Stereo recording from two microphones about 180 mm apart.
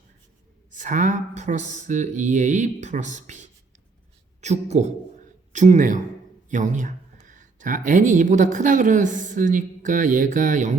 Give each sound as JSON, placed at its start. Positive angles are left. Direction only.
{"t": 0.7, "sound": "speech", "side_deg": -45}